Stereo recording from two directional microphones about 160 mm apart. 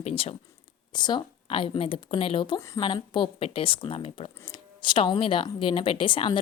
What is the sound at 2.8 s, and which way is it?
Speech, 35° left (ahead or behind).